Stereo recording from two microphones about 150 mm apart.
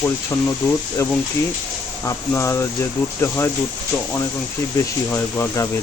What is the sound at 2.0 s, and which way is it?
Speech, 20° left (ahead or behind).